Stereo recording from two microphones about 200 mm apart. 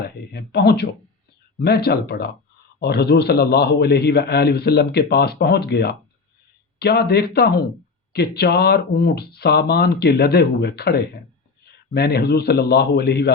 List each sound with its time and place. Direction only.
0.0 s a man's voice: 55° left (ahead or behind)